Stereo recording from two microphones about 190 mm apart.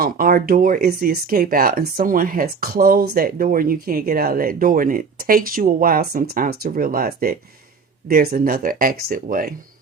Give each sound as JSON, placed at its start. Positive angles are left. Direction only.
{"t": 0.0, "sound": "speech", "side_deg": -50}